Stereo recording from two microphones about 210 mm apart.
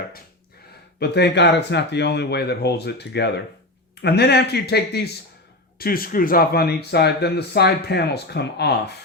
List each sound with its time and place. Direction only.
0.9 s speech: 55° left (ahead or behind)